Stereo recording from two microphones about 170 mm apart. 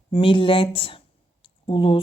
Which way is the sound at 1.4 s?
30° left (ahead or behind).